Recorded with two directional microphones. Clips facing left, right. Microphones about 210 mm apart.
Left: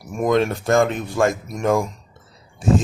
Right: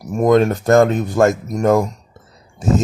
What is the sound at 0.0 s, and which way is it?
Speech, 40° right (ahead or behind).